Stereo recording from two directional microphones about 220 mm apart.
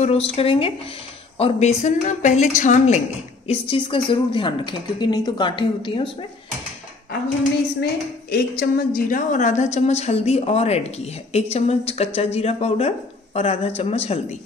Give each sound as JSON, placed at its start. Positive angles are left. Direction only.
{"t": 0.0, "sound": "a woman's voice", "side_deg": 25}
{"t": 8.3, "sound": "a woman's voice", "side_deg": 45}